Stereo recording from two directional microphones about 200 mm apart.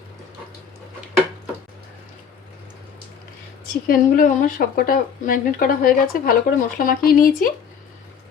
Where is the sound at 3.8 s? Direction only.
45° left (ahead or behind).